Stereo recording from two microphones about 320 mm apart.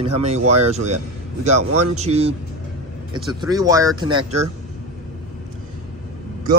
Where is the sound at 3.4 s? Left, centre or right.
Centre.